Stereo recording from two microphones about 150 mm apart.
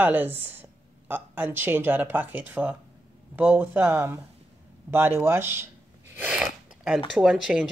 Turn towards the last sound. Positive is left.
turn(degrees=-5)  # may be behind; listen again after turning